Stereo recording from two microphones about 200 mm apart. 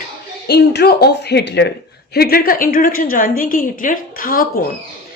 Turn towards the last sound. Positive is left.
turn(degrees=45)  # may be behind; listen again after turning